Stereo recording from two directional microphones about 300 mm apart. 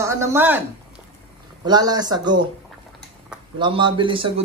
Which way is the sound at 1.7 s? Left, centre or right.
Centre.